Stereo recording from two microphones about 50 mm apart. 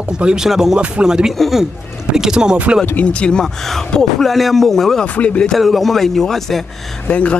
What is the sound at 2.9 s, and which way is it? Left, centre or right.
Speech, left.